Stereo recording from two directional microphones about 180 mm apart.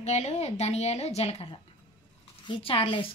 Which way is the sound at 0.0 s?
40° left (ahead or behind).